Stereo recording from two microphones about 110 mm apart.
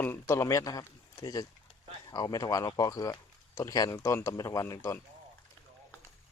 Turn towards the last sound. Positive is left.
turn(degrees=30)  # may be behind; listen again after turning